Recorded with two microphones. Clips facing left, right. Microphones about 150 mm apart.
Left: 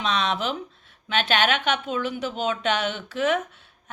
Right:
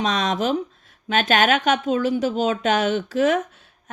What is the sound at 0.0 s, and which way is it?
Speech, 40° right (ahead or behind).